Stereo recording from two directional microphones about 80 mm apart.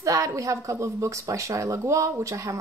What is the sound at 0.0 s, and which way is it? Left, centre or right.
Speech, right.